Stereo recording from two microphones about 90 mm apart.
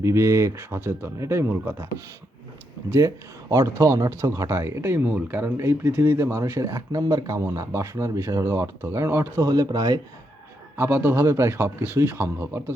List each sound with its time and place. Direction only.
0.0 s a man's voice: 30° right (ahead or behind)
3.5 s speech: 35° right (ahead or behind)
9.5 s speech: 45° right (ahead or behind)
10.8 s a man's voice: 25° right (ahead or behind)